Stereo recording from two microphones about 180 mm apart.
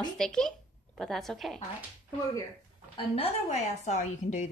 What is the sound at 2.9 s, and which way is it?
A woman's voice, 30° left (ahead or behind).